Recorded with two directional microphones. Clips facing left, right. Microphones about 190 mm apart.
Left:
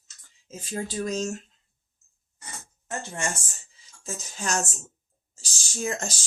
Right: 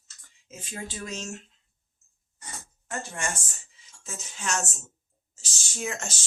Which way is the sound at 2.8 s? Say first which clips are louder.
Left 2 dB; 25° left (ahead or behind).